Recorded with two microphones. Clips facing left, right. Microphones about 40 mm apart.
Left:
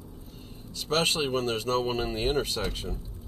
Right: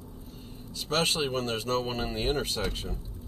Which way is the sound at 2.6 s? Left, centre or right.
Centre.